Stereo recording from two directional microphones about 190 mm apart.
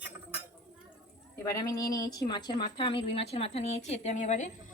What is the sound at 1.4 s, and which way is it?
A woman's voice, 20° left (ahead or behind).